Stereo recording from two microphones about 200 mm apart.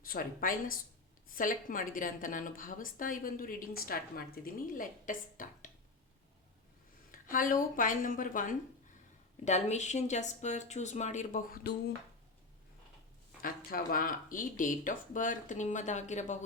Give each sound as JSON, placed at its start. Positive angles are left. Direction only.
{"t": 0.0, "sound": "a woman's voice", "side_deg": 45}
{"t": 7.3, "sound": "speech", "side_deg": 40}
{"t": 13.4, "sound": "speech", "side_deg": 45}